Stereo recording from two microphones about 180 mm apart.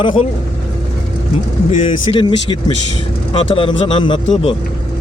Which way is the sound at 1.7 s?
30° left (ahead or behind).